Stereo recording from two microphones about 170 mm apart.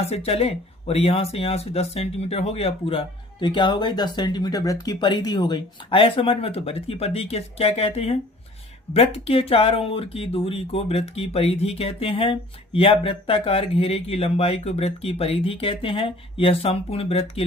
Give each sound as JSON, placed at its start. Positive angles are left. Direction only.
{"t": 0.0, "sound": "speech", "side_deg": 35}